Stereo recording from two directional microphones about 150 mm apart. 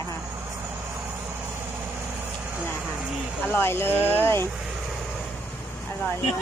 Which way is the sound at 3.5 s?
15° left (ahead or behind).